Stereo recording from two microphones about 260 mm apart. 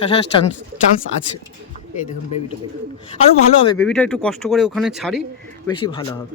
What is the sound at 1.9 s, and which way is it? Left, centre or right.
Speech, left.